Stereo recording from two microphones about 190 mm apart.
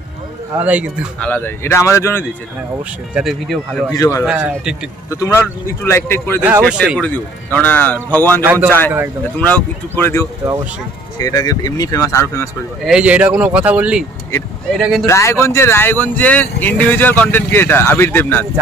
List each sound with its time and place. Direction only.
0.6 s speech: 5° right (ahead or behind)
1.2 s speech: 10° left (ahead or behind)
3.2 s speech: centre (ahead or behind)
3.9 s speech: 20° left (ahead or behind)
4.2 s speech: 5° right (ahead or behind)
5.1 s speech: 15° left (ahead or behind)
7.5 s speech: 10° left (ahead or behind)
12.8 s speech: 5° right (ahead or behind)
15.0 s speech: 15° left (ahead or behind)